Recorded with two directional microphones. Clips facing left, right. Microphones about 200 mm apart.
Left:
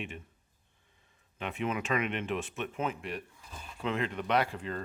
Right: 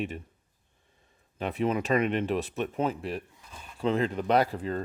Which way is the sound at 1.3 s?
35° right (ahead or behind).